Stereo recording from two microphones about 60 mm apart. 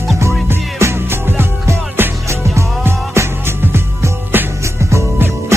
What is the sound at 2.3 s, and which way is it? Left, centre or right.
Music, right.